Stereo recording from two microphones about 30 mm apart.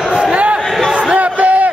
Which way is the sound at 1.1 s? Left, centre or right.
Right.